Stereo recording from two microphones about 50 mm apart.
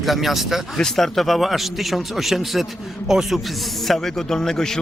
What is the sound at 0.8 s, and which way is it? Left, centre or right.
Speech, centre.